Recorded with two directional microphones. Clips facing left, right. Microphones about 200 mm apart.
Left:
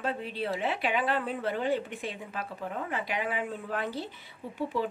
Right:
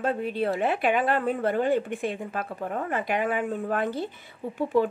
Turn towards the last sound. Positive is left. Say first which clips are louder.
# right 7 dB
turn(degrees=-50)  # may be behind; listen again after turning